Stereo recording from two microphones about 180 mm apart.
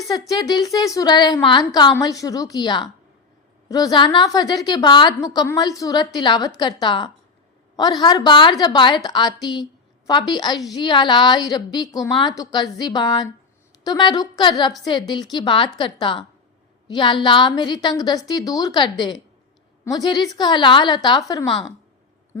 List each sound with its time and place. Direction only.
0.1 s a woman's voice: 20° left (ahead or behind)